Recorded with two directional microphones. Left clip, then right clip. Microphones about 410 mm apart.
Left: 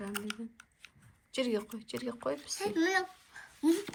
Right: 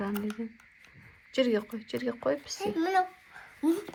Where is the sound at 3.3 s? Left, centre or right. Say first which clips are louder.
Right 1 dB; centre.